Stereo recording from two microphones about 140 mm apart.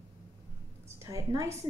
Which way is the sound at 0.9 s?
20° right (ahead or behind).